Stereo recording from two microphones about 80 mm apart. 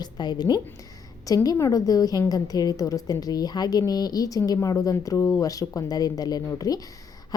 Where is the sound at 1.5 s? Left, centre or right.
Left.